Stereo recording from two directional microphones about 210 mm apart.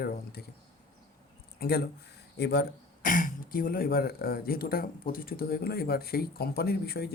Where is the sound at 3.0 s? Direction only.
40° left (ahead or behind).